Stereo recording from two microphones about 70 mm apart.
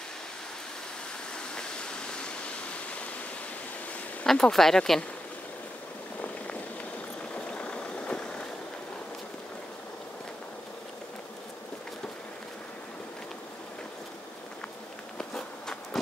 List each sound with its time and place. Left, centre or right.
1.5 s waterfall: centre
4.3 s speech: centre
7.3 s vehicle: centre
15.1 s insect: centre